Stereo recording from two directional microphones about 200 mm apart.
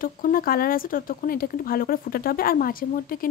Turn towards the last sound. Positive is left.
turn(degrees=45)  # may be behind; listen again after turning